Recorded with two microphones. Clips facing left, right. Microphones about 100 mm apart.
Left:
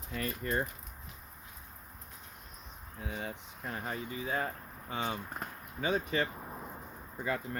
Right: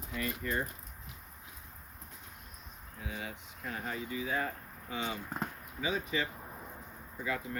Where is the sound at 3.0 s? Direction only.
40° left (ahead or behind).